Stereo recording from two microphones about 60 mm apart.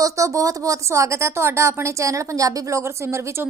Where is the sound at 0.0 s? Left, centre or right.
Right.